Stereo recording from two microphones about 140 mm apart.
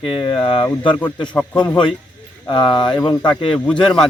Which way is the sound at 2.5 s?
35° left (ahead or behind).